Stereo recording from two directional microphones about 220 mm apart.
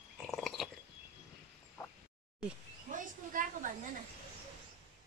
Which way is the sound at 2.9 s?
35° right (ahead or behind).